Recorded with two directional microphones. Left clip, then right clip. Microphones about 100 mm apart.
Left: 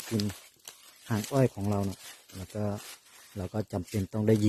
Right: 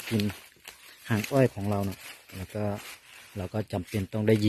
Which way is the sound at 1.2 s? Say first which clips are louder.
Right 3 dB; centre (ahead or behind).